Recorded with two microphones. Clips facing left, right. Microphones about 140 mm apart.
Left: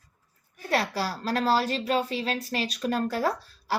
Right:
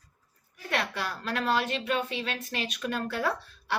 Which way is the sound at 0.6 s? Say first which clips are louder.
Left 4 dB; 35° left (ahead or behind).